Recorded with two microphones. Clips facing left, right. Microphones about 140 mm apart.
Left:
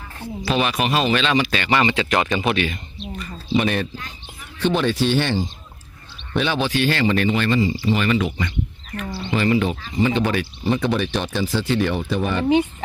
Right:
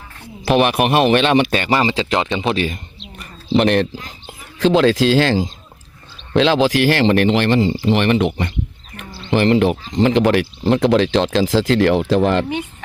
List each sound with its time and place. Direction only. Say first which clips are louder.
0.4 s speech: right 6 dB; 60° right (ahead or behind); by 2.6 s 25° right (ahead or behind)
2.6 s speech: right 2 dB; 40° right (ahead or behind)
3.6 s speech: right 7 dB; 70° right (ahead or behind)
4.6 s speech: right 6 dB; 90° right; by 8.4 s 60° right (ahead or behind)
9.3 s speech: right 6 dB; 70° right (ahead or behind)
9.9 s speech: right 5 dB; 90° right